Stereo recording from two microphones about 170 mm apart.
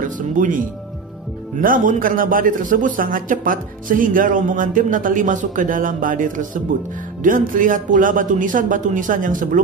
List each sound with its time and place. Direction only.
0.0 s a man's voice: 50° right (ahead or behind)